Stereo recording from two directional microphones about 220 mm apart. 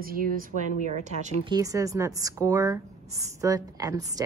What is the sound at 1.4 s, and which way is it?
Speech, 15° right (ahead or behind).